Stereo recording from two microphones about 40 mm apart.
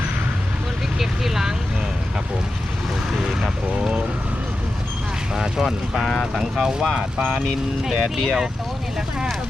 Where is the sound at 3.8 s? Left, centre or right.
Right.